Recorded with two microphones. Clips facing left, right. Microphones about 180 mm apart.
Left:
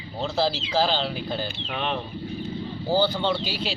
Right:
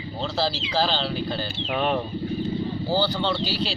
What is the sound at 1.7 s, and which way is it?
Speech, 45° right (ahead or behind).